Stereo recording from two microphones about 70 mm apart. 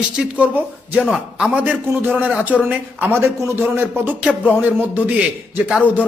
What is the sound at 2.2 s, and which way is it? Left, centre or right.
A man's voice, right.